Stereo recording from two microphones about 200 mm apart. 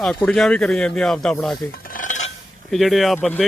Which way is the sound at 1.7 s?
45° left (ahead or behind).